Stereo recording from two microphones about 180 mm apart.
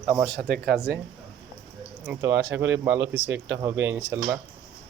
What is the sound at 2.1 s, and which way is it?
Speech, 10° right (ahead or behind).